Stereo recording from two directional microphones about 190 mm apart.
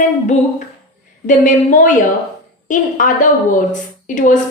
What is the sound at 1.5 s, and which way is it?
A woman's voice, 45° left (ahead or behind).